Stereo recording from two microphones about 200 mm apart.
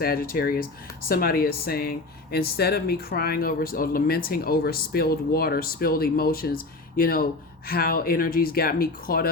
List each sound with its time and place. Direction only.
0.0 s speech: 45° left (ahead or behind)